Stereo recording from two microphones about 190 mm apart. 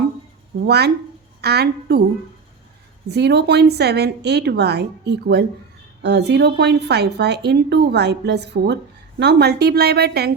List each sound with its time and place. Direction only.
0.6 s speech: 60° right (ahead or behind)
3.1 s speech: 60° right (ahead or behind)